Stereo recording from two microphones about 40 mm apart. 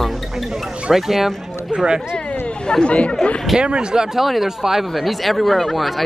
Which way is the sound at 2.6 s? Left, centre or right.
Left.